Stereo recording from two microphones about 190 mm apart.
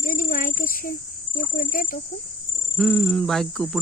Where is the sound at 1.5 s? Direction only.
45° left (ahead or behind).